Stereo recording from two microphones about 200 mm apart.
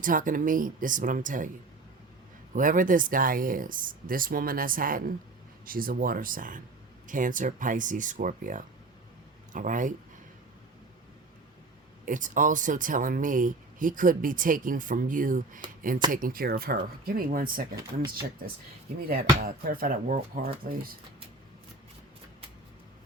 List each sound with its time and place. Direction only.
0.0 s speech: 40° right (ahead or behind)
2.6 s speech: 40° right (ahead or behind)
12.0 s speech: 40° right (ahead or behind)